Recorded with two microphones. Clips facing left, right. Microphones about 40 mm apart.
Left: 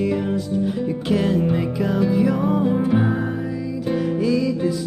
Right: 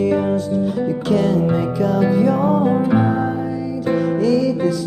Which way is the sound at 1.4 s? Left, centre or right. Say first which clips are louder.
Right 3 dB; centre.